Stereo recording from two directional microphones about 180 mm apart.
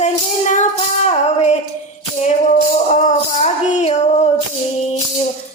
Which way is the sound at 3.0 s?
40° left (ahead or behind).